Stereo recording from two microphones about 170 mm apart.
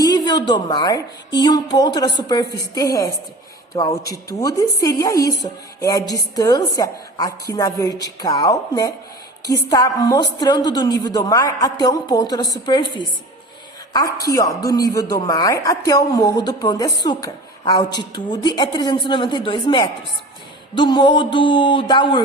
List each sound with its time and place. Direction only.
0.0 s a woman's voice: 25° left (ahead or behind)